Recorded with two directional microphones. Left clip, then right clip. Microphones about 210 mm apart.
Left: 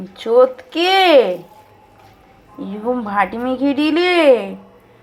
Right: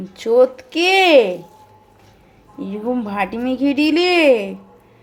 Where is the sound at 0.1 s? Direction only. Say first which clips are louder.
Left 1 dB; 20° right (ahead or behind).